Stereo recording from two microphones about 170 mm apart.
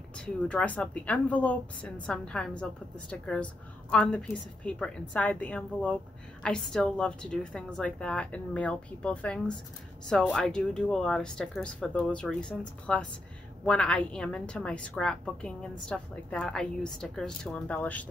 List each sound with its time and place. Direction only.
0.2 s a woman's voice: 5° left (ahead or behind)